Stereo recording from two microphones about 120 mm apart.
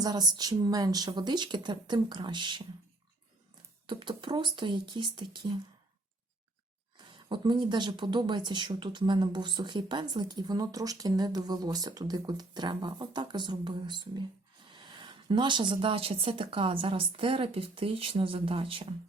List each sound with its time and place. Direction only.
0.0 s speech: 35° right (ahead or behind)
3.8 s speech: 40° right (ahead or behind)
6.9 s speech: 40° right (ahead or behind)